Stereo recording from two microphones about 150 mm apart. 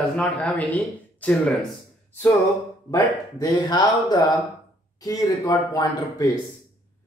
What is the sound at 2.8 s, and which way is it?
A man's voice, 25° left (ahead or behind).